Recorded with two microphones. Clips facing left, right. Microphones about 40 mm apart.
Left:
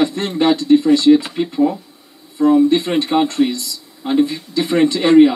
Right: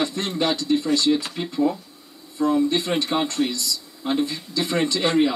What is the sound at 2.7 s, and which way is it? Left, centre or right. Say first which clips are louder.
Speech: left 7 dB; left.